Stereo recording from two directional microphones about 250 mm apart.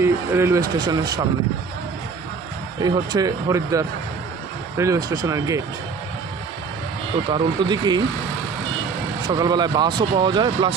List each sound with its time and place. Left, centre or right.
0.0 s speech: centre
2.8 s speech: centre
7.3 s speech: centre
9.3 s speech: centre